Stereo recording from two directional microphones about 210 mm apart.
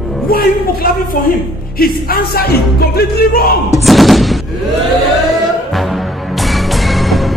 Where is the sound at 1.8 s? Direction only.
45° left (ahead or behind).